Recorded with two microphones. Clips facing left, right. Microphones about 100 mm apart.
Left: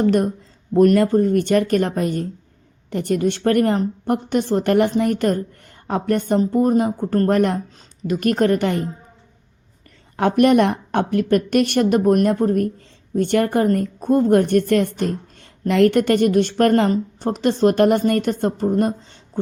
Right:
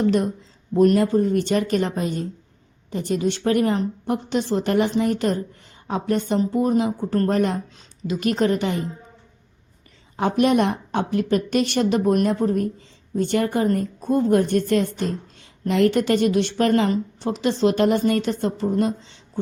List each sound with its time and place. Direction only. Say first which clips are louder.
0.0 s a woman's voice: left 3 dB; 50° left (ahead or behind)
7.3 s a woman's voice: left 3 dB; 60° left (ahead or behind)
10.2 s a woman's voice: left 4 dB; 60° left (ahead or behind)